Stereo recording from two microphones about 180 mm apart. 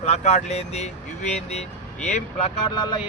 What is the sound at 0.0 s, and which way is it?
Speech, 40° left (ahead or behind).